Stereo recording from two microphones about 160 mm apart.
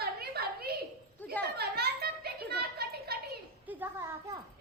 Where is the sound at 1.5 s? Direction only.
80° right.